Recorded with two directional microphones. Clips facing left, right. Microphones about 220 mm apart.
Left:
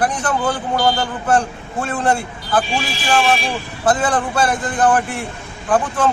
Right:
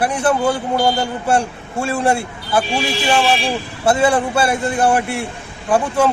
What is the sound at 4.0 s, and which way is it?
A man's voice, 10° right (ahead or behind).